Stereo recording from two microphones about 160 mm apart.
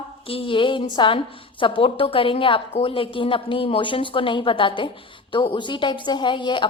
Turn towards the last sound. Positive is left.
turn(degrees=30)  # may be behind; listen again after turning